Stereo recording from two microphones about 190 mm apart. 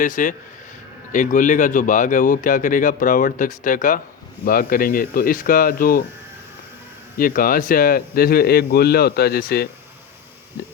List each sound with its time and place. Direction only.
0.0 s speech: 45° left (ahead or behind)
7.2 s speech: 50° left (ahead or behind)